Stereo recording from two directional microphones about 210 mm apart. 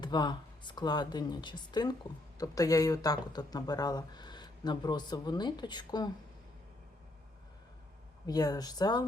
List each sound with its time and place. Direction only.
0.0 s speech: 20° left (ahead or behind)
8.3 s speech: 20° left (ahead or behind)